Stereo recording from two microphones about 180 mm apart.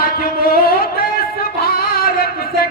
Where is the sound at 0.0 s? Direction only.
55° left (ahead or behind).